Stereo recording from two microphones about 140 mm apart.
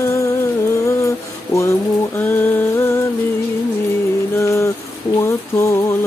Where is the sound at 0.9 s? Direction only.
20° left (ahead or behind).